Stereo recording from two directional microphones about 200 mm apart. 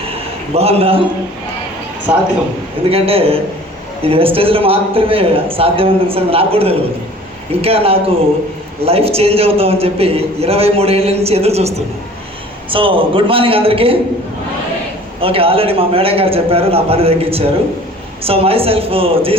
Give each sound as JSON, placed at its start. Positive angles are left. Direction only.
{"t": 0.1, "sound": "a sound", "side_deg": -30}
{"t": 2.1, "sound": "speech", "side_deg": -10}
{"t": 2.9, "sound": "a man's voice", "side_deg": -30}
{"t": 12.7, "sound": "a man's voice", "side_deg": -25}
{"t": 15.2, "sound": "a man's voice", "side_deg": -30}